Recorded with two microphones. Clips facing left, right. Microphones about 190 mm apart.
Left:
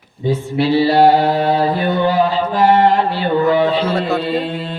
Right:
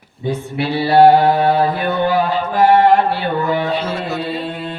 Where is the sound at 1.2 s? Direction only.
40° left (ahead or behind).